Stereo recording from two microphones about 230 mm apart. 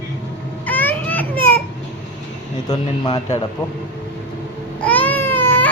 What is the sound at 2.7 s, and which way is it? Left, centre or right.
Speech, centre.